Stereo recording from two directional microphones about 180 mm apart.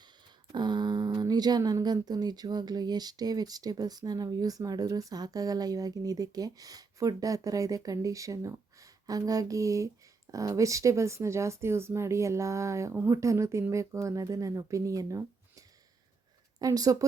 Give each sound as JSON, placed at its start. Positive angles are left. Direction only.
{"t": 0.5, "sound": "speech", "side_deg": -25}